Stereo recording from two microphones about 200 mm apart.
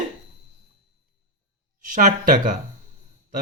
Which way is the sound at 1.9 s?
40° right (ahead or behind).